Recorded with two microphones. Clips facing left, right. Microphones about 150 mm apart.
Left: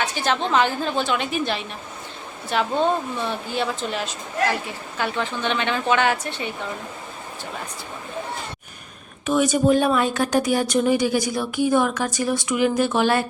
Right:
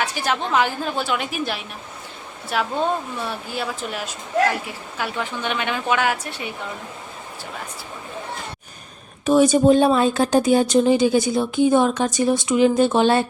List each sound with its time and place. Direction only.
0.0 s a woman's voice: 10° right (ahead or behind)
9.2 s speech: 30° right (ahead or behind)